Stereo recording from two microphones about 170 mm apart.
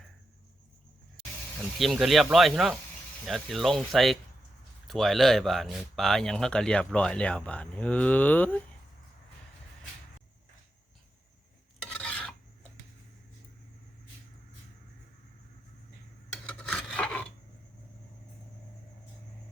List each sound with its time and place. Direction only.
1.8 s speech: centre (ahead or behind)
11.8 s filing: 5° left (ahead or behind)
16.3 s filing: centre (ahead or behind)